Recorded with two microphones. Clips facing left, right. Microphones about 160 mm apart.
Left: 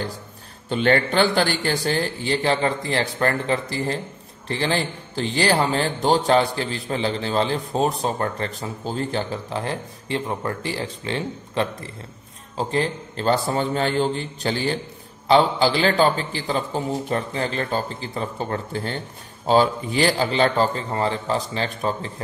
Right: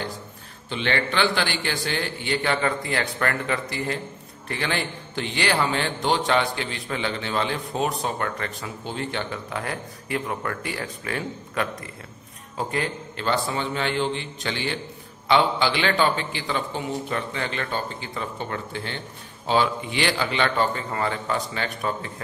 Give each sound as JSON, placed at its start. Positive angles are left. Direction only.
{"t": 0.7, "sound": "a man's voice", "side_deg": 45}